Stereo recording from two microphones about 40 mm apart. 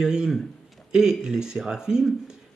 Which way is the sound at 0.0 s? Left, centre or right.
Centre.